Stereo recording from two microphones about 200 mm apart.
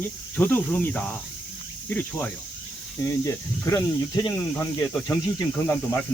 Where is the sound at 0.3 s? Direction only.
10° left (ahead or behind).